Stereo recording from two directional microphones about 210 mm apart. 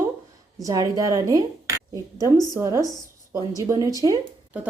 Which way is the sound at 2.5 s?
15° right (ahead or behind).